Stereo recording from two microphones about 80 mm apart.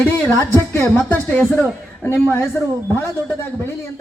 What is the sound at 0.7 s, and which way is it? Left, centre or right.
Speech, left.